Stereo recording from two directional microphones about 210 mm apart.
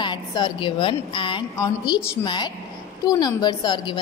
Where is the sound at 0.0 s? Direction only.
20° left (ahead or behind).